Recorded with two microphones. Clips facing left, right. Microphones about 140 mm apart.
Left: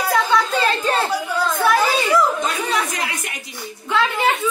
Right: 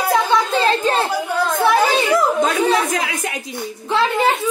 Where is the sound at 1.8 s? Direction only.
50° right (ahead or behind).